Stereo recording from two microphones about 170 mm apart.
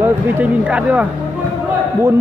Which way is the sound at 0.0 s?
10° right (ahead or behind).